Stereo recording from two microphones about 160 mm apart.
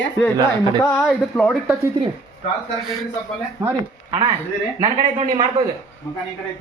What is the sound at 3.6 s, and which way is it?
Speech, 15° right (ahead or behind).